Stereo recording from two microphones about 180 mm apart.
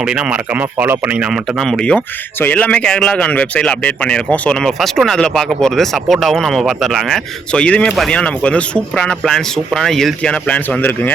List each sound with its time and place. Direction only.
0.0 s a man's voice: 5° right (ahead or behind)